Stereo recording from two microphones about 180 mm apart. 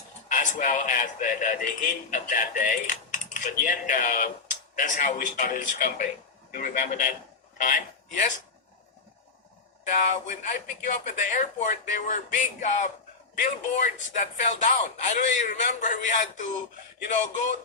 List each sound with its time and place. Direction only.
0.3 s a man's voice: 45° left (ahead or behind)
9.9 s speech: 40° left (ahead or behind)